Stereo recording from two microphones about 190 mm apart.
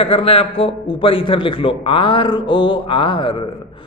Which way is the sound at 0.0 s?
30° left (ahead or behind).